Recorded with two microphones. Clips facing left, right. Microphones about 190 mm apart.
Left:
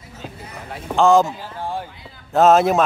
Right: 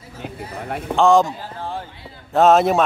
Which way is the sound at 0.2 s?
60° right (ahead or behind).